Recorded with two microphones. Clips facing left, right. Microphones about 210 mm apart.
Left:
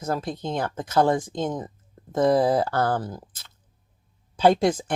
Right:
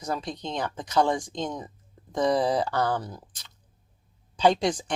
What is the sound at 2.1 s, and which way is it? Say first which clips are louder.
Speech: left 4 dB; 55° left (ahead or behind).